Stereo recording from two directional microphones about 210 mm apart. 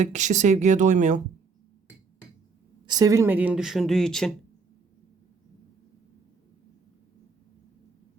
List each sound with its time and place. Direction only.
0.0 s speech: 35° right (ahead or behind)
2.8 s speech: 20° right (ahead or behind); by 4.3 s centre (ahead or behind)